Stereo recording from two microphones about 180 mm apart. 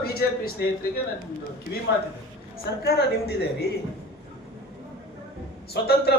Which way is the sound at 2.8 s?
65° left (ahead or behind).